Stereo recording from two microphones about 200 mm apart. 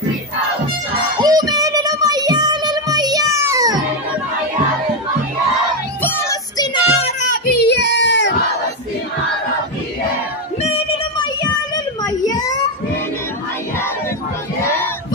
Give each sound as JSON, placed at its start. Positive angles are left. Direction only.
{"t": 1.2, "sound": "child singing", "side_deg": -20}
{"t": 6.0, "sound": "child singing", "side_deg": 15}
{"t": 7.4, "sound": "child singing", "side_deg": 55}
{"t": 11.7, "sound": "child singing", "side_deg": 20}
{"t": 14.6, "sound": "honk", "side_deg": 10}